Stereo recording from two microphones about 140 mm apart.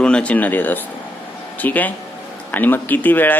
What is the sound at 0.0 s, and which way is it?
Speech, 5° left (ahead or behind).